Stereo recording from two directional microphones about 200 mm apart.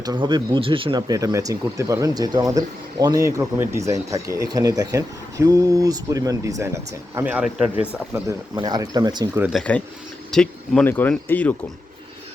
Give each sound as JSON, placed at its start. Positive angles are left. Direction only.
{"t": 0.0, "sound": "speech", "side_deg": -20}
{"t": 9.5, "sound": "speech", "side_deg": 5}